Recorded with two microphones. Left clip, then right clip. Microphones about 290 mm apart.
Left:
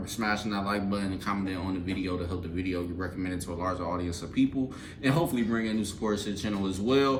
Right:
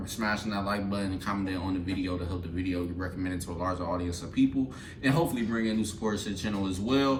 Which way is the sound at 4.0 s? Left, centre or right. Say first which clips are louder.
Even; centre.